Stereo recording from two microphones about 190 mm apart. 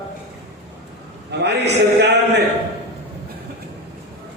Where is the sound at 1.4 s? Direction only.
65° right (ahead or behind).